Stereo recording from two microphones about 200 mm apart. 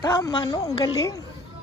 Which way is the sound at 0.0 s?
20° left (ahead or behind).